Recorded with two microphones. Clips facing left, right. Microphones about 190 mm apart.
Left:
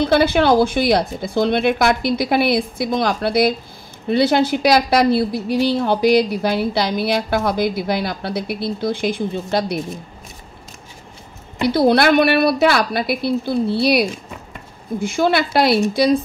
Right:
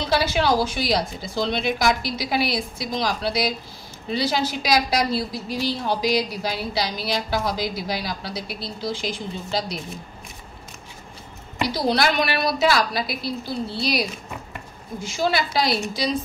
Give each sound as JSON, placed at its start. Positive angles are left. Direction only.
{"t": 0.0, "sound": "a woman's voice", "side_deg": 55}
{"t": 11.6, "sound": "a woman's voice", "side_deg": 55}